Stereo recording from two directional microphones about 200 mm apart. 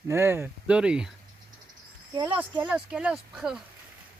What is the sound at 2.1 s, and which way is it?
Speech, 20° right (ahead or behind).